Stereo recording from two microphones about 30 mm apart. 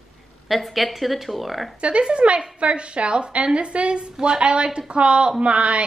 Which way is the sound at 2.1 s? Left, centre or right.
Right.